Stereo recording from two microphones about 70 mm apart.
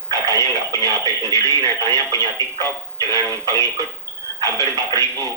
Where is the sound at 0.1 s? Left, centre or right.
Right.